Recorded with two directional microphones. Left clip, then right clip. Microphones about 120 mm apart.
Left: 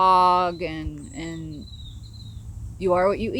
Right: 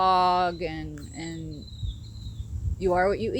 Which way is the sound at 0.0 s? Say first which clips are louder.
Left 4 dB; 35° left (ahead or behind).